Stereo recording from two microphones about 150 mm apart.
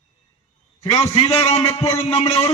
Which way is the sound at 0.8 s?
45° left (ahead or behind).